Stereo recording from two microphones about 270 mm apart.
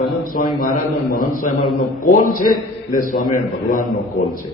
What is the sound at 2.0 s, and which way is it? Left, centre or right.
A man's voice, left.